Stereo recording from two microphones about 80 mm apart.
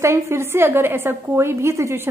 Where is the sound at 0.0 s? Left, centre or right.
Right.